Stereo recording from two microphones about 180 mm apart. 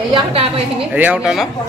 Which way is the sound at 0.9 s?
10° right (ahead or behind).